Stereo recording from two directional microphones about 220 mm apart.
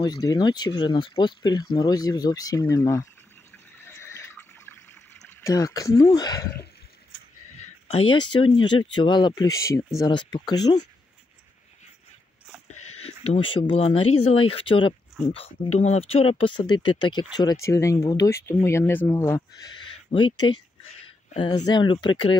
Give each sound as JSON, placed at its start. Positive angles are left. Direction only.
{"t": 0.0, "sound": "speech", "side_deg": 20}
{"t": 3.8, "sound": "water", "side_deg": 10}
{"t": 6.0, "sound": "speech", "side_deg": 20}
{"t": 7.5, "sound": "speech", "side_deg": 30}
{"t": 12.7, "sound": "a sound", "side_deg": 90}
{"t": 13.0, "sound": "speech", "side_deg": 30}